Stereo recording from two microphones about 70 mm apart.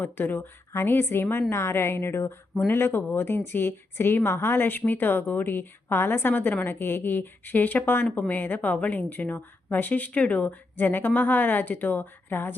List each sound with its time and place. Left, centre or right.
0.0 s a woman's voice: left